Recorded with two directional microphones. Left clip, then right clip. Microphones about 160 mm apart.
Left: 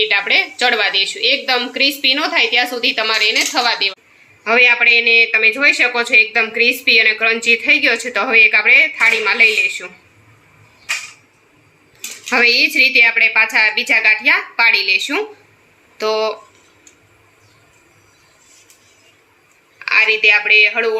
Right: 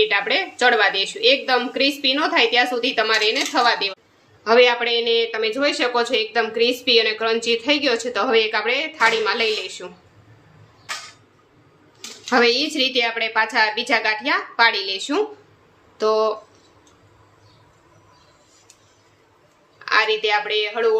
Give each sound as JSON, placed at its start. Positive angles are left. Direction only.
{"t": 0.0, "sound": "a woman's voice", "side_deg": -15}
{"t": 12.3, "sound": "a woman's voice", "side_deg": -20}
{"t": 19.8, "sound": "speech", "side_deg": -5}